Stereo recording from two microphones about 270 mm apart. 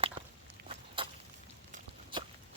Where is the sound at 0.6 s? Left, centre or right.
Centre.